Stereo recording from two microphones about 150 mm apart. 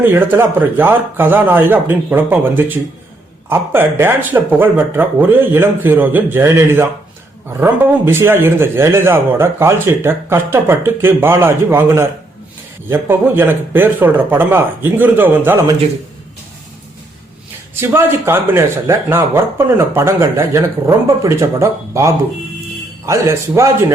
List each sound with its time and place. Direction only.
0.0 s a man's voice: 15° right (ahead or behind)
17.7 s a man's voice: 15° right (ahead or behind)